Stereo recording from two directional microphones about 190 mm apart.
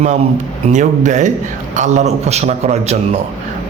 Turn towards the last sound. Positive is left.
turn(degrees=-35)  # may be behind; listen again after turning